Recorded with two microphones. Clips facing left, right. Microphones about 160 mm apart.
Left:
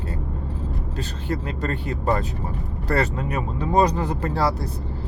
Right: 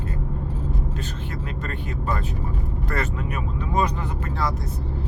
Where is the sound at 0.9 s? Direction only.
35° left (ahead or behind).